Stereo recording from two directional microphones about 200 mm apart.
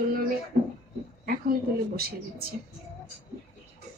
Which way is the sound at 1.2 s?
50° right (ahead or behind).